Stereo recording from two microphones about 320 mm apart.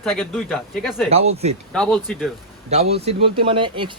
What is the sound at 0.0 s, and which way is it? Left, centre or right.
A man's voice, centre.